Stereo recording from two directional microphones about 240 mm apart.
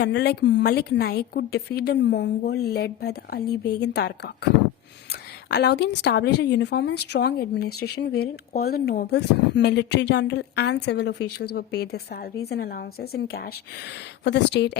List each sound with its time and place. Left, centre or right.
0.0 s a woman's voice: left
5.5 s a woman's voice: left